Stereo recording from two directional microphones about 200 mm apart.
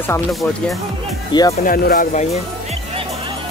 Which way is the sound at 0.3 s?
Centre (ahead or behind).